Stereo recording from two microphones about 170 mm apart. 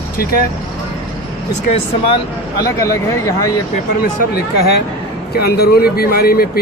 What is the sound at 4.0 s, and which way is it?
Speech, 65° left (ahead or behind).